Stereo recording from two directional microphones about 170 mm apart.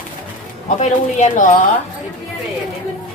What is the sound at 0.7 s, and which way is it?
Speech, 45° left (ahead or behind).